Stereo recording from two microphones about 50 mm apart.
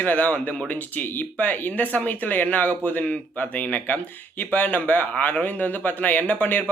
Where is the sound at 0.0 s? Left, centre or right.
Left.